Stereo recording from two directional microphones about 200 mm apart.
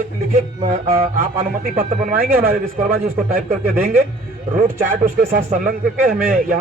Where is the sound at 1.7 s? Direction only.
45° right (ahead or behind).